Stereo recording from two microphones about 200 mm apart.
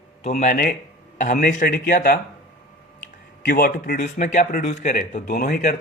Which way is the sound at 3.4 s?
45° left (ahead or behind).